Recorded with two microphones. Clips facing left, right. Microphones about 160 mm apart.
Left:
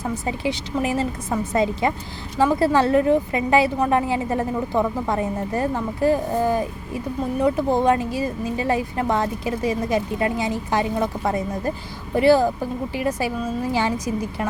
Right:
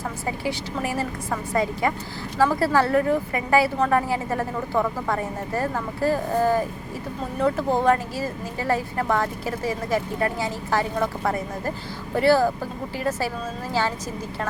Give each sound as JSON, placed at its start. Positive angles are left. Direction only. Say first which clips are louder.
{"t": 0.3, "sound": "speech", "louder": "even", "side_deg": 20}
{"t": 2.4, "sound": "speech", "louder": "left 2 dB", "side_deg": 20}